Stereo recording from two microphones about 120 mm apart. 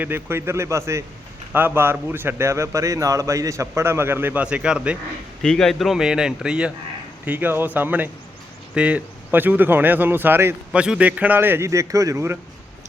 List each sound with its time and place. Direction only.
0.0 s a man's voice: 20° right (ahead or behind)
5.4 s a man's voice: 5° left (ahead or behind); by 12.4 s 20° right (ahead or behind)